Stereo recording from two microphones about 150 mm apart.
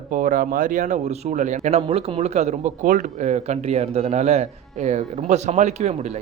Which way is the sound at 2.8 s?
60° right (ahead or behind).